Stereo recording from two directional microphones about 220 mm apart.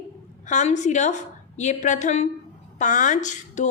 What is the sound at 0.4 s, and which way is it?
A woman's voice, 35° left (ahead or behind).